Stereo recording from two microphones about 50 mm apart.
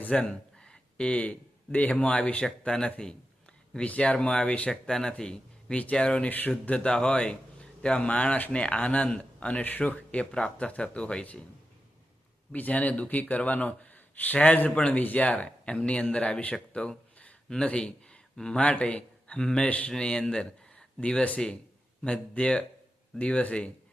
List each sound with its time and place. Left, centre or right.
0.2 s speech: centre
4.7 s speech: centre
6.2 s speech: left
6.7 s speech: left
10.3 s speech: centre
12.5 s speech: left; by 18.6 s centre
18.6 s a man's voice: left
19.6 s speech: left
19.9 s speech: centre